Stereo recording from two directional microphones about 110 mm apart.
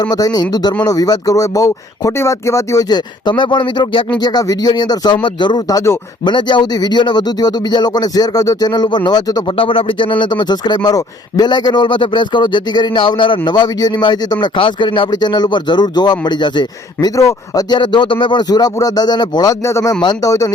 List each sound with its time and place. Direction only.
0.0 s speech: 35° left (ahead or behind)
6.2 s speech: 45° left (ahead or behind)
9.5 s a man's voice: 55° left (ahead or behind)
17.2 s speech: 30° left (ahead or behind)